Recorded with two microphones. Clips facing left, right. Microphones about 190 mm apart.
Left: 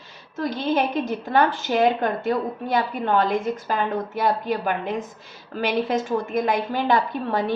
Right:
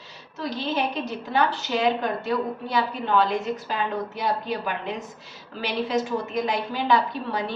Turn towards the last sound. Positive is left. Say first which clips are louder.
# left 2 dB
turn(degrees=50)  # may be behind; listen again after turning